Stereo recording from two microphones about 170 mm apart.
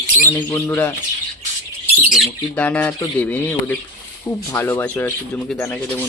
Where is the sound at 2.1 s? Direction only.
5° left (ahead or behind).